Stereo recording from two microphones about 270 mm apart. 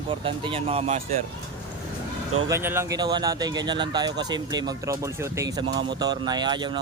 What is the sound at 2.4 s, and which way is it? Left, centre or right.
Speech, centre.